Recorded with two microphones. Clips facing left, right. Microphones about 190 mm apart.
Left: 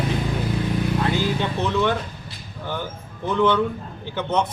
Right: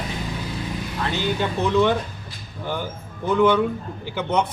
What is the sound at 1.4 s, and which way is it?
Speech, 15° right (ahead or behind).